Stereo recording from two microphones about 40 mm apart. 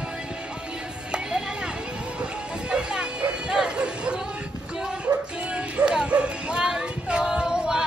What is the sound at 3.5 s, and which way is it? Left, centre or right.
Chatter, right.